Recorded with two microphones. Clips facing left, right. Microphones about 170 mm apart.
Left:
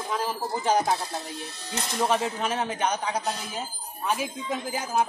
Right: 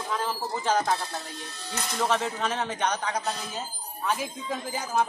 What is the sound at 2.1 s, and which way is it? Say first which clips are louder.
Speech: left 1 dB; 10° left (ahead or behind).